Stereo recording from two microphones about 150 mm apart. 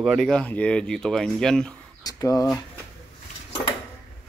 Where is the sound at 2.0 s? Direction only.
25° left (ahead or behind).